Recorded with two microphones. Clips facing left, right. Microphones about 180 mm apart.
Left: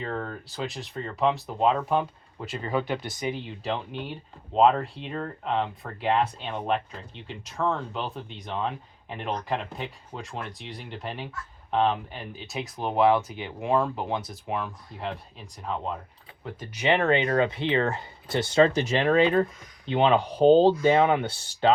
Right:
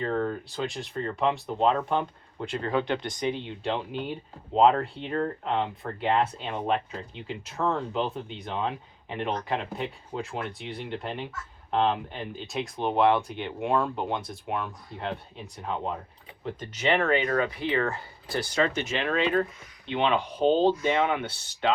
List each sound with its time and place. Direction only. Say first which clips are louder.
0.0 s speech: right 5 dB; centre (ahead or behind)
16.4 s speech: right 1 dB; 10° left (ahead or behind); by 21.2 s 35° left (ahead or behind)